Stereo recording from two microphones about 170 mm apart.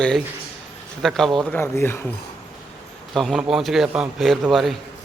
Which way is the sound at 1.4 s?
15° left (ahead or behind).